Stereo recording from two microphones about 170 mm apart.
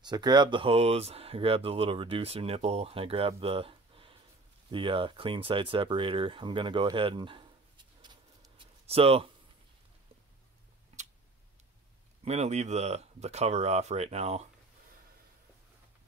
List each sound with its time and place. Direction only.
0.0 s speech: 25° right (ahead or behind)
12.3 s speech: 40° right (ahead or behind)